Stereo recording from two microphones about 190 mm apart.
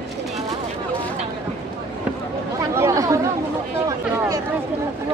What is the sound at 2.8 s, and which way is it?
Speech, 15° right (ahead or behind).